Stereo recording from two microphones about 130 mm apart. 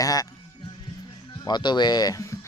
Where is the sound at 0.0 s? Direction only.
25° left (ahead or behind).